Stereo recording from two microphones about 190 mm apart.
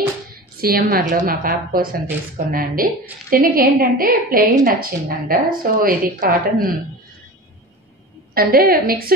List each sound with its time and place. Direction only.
0.6 s a woman's voice: 50° right (ahead or behind)
8.4 s a woman's voice: 55° right (ahead or behind)